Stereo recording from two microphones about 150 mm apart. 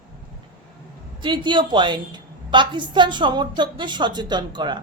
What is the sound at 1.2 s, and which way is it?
A woman's voice, 30° right (ahead or behind).